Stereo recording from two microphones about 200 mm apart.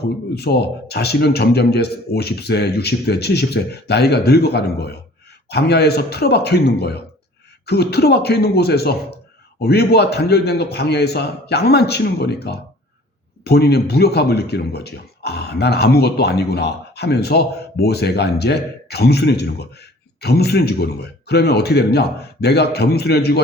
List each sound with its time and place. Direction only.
0.0 s speech: 55° left (ahead or behind)